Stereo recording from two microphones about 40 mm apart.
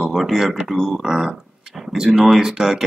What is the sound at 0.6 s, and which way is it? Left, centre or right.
Speech, centre.